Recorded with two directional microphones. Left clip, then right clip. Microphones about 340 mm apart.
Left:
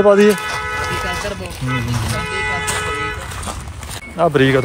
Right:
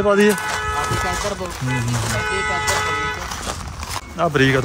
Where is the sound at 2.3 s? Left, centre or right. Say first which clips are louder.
Even; right.